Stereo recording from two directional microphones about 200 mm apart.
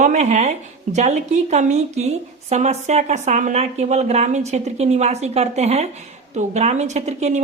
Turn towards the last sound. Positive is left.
turn(degrees=-35)  # may be behind; listen again after turning